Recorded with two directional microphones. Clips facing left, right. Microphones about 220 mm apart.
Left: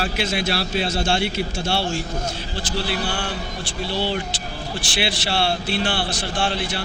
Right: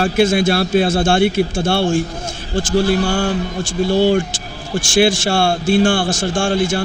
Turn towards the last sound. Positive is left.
turn(degrees=-45)  # may be behind; listen again after turning